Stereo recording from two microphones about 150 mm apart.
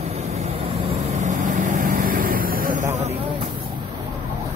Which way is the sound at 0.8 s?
50° right (ahead or behind).